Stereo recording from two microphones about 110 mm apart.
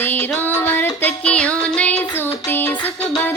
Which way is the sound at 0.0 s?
20° left (ahead or behind).